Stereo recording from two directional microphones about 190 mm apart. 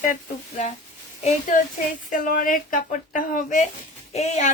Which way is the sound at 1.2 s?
40° left (ahead or behind).